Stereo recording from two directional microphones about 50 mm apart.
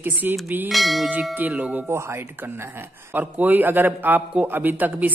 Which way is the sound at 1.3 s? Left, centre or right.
Right.